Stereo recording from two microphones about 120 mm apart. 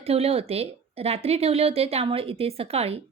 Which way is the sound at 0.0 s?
55° right (ahead or behind).